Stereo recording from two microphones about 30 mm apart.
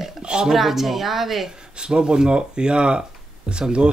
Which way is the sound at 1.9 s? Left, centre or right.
Right.